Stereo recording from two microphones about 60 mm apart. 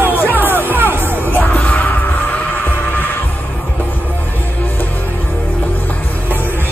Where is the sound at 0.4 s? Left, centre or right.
Right.